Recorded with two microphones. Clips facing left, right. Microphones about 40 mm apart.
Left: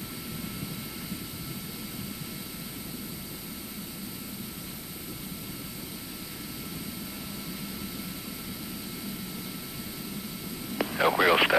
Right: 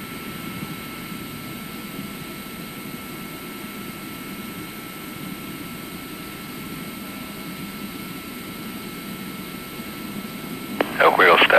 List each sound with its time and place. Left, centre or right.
10.8 s vehicle: right